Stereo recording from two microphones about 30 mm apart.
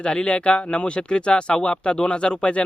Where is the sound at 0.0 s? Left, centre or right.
Left.